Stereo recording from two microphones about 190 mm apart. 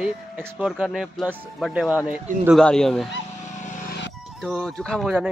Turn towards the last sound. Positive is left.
turn(degrees=0)  # may be behind; listen again after turning